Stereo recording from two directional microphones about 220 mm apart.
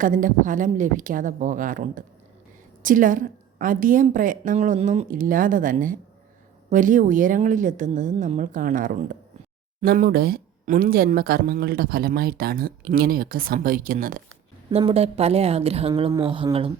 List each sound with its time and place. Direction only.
0.0 s speech: 35° right (ahead or behind)
14.7 s a woman's voice: 30° right (ahead or behind)